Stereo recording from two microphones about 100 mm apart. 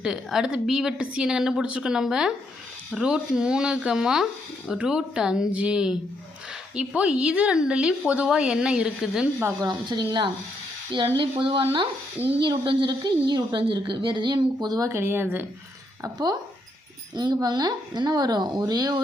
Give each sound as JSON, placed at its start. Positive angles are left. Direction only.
{"t": 0.0, "sound": "a woman's voice", "side_deg": -5}
{"t": 9.6, "sound": "a woman's voice", "side_deg": -45}
{"t": 11.2, "sound": "a woman's voice", "side_deg": -55}
{"t": 14.8, "sound": "speech", "side_deg": -25}
{"t": 17.2, "sound": "a woman's voice", "side_deg": -45}